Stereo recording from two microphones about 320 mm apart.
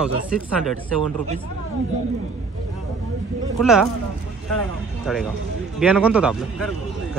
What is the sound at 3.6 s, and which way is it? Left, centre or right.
Speech, centre.